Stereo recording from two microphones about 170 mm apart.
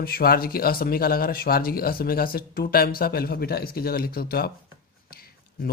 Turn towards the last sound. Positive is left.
turn(degrees=65)  # may be behind; listen again after turning